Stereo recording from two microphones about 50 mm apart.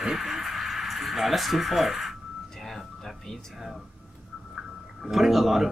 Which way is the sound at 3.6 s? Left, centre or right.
Centre.